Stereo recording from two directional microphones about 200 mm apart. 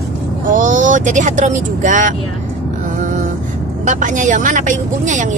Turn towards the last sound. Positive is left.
turn(degrees=-40)  # may be behind; listen again after turning